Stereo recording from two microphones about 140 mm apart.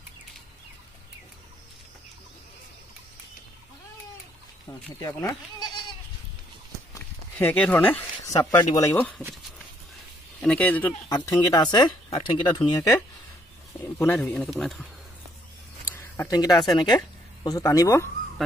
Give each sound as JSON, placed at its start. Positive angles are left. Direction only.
{"t": 5.0, "sound": "speech", "side_deg": 25}
{"t": 6.9, "sound": "walk", "side_deg": 15}
{"t": 8.3, "sound": "speech", "side_deg": 25}
{"t": 8.7, "sound": "speech", "side_deg": 15}
{"t": 10.4, "sound": "speech", "side_deg": 10}
{"t": 11.1, "sound": "speech", "side_deg": 25}
{"t": 13.9, "sound": "speech", "side_deg": 15}
{"t": 16.3, "sound": "speech", "side_deg": 25}